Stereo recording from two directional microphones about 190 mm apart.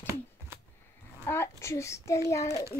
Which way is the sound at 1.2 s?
15° left (ahead or behind).